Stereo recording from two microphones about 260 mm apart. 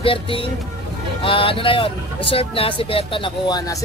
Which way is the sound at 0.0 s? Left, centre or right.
Left.